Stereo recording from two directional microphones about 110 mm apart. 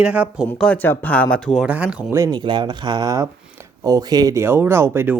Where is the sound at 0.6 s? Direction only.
15° left (ahead or behind).